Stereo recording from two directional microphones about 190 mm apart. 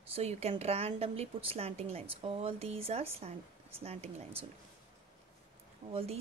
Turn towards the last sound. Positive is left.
turn(degrees=-30)  # may be behind; listen again after turning